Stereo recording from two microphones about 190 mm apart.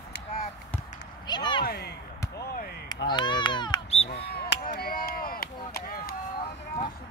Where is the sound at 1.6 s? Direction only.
55° left (ahead or behind).